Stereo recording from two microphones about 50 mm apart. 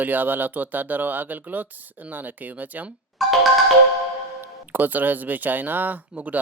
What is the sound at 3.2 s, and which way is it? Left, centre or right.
Music, centre.